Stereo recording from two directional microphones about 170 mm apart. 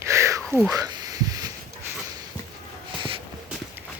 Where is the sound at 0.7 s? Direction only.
20° right (ahead or behind).